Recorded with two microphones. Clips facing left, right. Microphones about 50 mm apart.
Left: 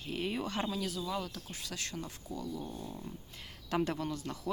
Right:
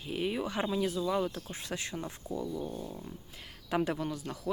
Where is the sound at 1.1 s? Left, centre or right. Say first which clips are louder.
Right 6 dB; right.